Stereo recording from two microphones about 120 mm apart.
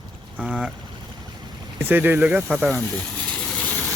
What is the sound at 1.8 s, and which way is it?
Speech, 15° right (ahead or behind).